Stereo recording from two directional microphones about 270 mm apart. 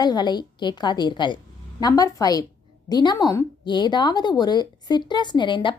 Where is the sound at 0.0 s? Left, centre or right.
Centre.